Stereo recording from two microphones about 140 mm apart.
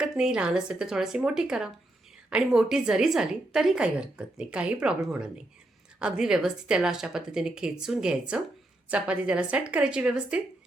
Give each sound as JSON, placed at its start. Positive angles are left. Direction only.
{"t": 0.0, "sound": "a woman's voice", "side_deg": -5}